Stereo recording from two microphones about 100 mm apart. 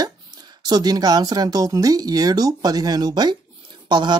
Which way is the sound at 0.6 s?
40° right (ahead or behind).